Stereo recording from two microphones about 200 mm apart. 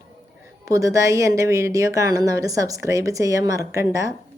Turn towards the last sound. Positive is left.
turn(degrees=-15)  # may be behind; listen again after turning